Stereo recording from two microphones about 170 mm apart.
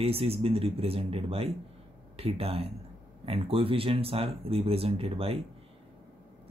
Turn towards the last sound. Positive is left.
turn(degrees=-35)  # may be behind; listen again after turning